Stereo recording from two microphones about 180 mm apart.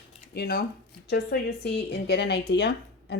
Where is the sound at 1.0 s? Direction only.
70° left (ahead or behind).